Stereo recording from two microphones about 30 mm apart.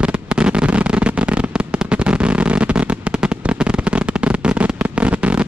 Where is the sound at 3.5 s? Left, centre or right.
Right.